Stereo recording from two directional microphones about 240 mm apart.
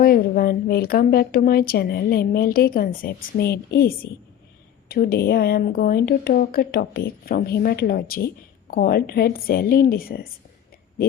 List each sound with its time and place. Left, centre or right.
0.0 s a woman's voice: left